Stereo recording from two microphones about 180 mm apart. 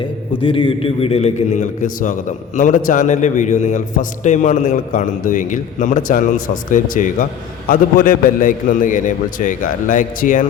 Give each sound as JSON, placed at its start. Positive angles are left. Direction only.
{"t": 0.4, "sound": "a man's voice", "side_deg": 30}